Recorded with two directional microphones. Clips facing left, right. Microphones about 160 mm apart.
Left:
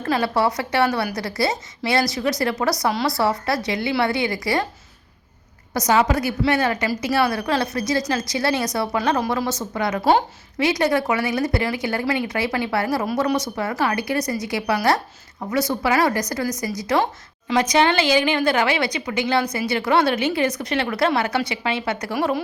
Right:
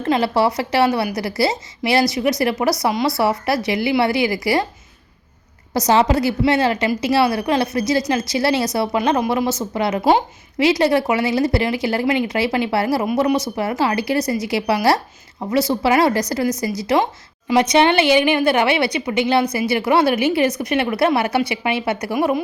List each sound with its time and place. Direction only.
0.0 s a woman's voice: 25° right (ahead or behind)
5.7 s a woman's voice: 30° right (ahead or behind)